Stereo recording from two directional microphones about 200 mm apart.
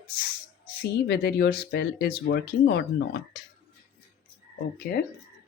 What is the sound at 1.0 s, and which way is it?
Speech, 55° left (ahead or behind).